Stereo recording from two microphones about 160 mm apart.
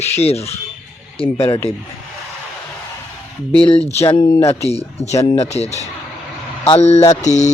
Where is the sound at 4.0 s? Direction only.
35° left (ahead or behind).